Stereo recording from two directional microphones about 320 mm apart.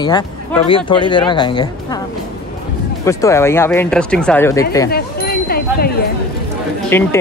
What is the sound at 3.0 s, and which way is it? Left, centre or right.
Speech, centre.